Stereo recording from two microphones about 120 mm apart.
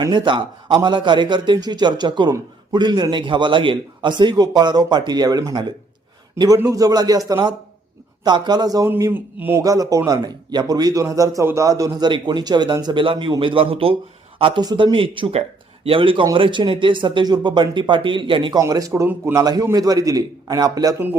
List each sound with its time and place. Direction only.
0.0 s a man's voice: 40° right (ahead or behind)
9.0 s a man's voice: 20° right (ahead or behind); by 14.6 s 45° right (ahead or behind)
14.6 s speech: 35° right (ahead or behind)
18.6 s a man's voice: 25° right (ahead or behind)